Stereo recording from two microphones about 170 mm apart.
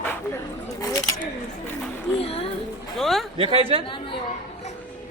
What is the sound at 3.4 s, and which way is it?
Speech, 35° right (ahead or behind).